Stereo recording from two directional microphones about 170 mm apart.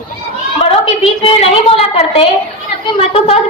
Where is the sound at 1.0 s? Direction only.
35° left (ahead or behind).